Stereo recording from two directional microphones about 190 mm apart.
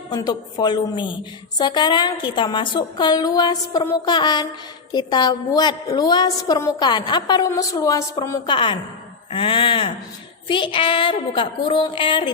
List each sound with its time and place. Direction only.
0.1 s a woman's voice: 20° left (ahead or behind)